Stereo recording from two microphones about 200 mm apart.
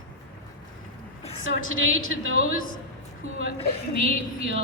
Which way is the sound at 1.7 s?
80° right.